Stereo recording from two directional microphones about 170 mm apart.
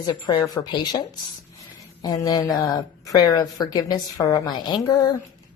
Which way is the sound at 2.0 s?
20° left (ahead or behind).